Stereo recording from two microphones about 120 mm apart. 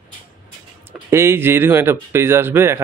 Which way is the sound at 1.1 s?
20° right (ahead or behind).